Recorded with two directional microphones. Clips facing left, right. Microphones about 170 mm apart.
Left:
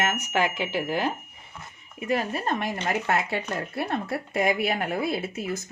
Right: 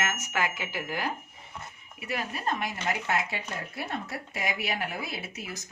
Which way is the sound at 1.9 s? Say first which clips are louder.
Left 8 dB; 45° left (ahead or behind).